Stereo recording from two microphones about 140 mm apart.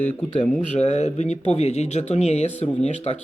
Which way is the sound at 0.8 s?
50° left (ahead or behind).